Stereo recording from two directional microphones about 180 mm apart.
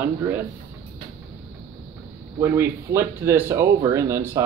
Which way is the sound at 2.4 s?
15° right (ahead or behind).